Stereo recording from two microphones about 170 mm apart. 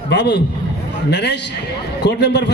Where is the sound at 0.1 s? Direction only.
90° left.